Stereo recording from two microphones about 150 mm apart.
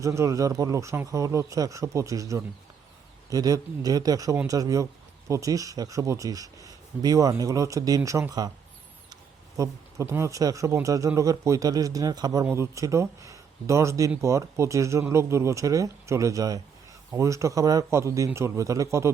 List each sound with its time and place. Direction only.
0.0 s a man's voice: 20° right (ahead or behind)
9.6 s a man's voice: 20° right (ahead or behind)